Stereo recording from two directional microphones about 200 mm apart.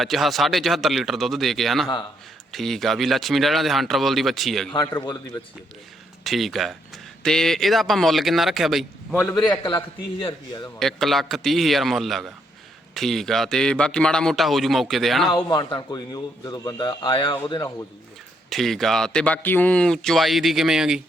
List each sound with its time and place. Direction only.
0.0 s speech: centre (ahead or behind)
4.7 s speech: 20° left (ahead or behind)
6.2 s speech: centre (ahead or behind)
9.5 s speech: 25° left (ahead or behind)
10.8 s speech: centre (ahead or behind)
15.4 s speech: 20° left (ahead or behind)
18.5 s speech: centre (ahead or behind)